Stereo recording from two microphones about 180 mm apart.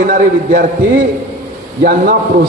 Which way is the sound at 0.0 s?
50° right (ahead or behind).